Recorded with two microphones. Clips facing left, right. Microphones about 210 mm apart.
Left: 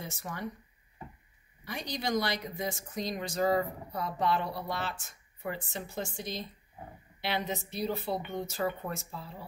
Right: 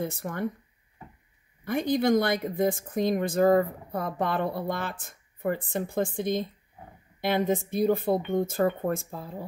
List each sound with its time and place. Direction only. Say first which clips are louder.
0.0 s speech: right 9 dB; 55° right (ahead or behind)
1.6 s speech: right 12 dB; 55° right (ahead or behind)